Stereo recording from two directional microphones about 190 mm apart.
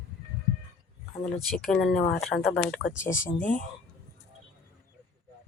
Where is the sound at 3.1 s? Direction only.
15° left (ahead or behind).